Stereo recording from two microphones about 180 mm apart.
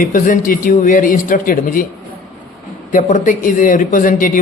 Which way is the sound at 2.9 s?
45° left (ahead or behind).